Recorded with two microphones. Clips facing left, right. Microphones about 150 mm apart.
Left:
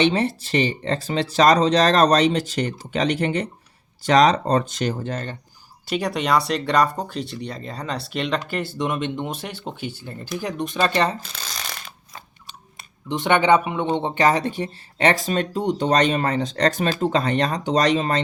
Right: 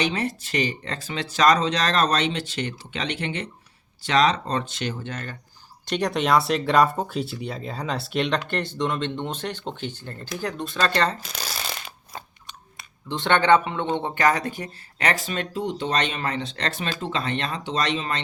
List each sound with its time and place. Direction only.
0.0 s speech: 30° left (ahead or behind)
5.8 s speech: 5° left (ahead or behind)
13.1 s speech: 15° left (ahead or behind); by 18.2 s 40° left (ahead or behind)